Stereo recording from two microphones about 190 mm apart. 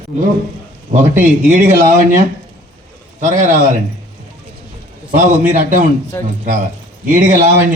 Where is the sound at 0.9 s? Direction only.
40° right (ahead or behind).